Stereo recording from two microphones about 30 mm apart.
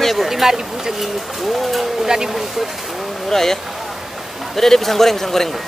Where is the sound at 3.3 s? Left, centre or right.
Centre.